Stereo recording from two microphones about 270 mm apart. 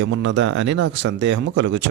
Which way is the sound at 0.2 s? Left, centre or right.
Right.